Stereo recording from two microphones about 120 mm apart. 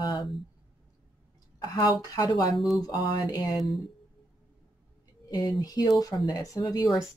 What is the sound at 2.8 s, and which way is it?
Speech, 30° left (ahead or behind).